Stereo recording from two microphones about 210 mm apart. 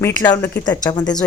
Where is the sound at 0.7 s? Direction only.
20° left (ahead or behind).